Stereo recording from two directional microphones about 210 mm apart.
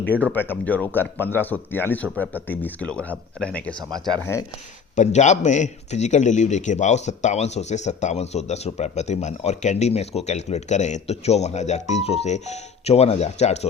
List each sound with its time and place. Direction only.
0.3 s speech: 10° left (ahead or behind)
3.8 s speech: 20° right (ahead or behind)
4.9 s a man's voice: 35° left (ahead or behind)